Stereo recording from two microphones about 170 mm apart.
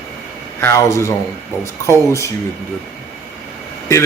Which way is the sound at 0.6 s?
15° left (ahead or behind).